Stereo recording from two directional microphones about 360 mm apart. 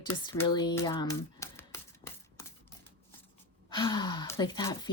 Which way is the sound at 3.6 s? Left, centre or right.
Centre.